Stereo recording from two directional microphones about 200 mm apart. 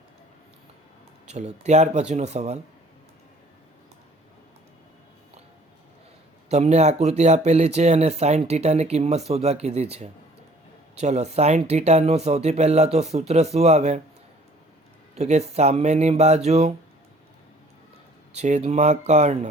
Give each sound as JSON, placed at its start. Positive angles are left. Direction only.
{"t": 1.3, "sound": "speech", "side_deg": -35}
{"t": 6.5, "sound": "speech", "side_deg": -35}
{"t": 15.1, "sound": "speech", "side_deg": -35}
{"t": 18.3, "sound": "speech", "side_deg": -35}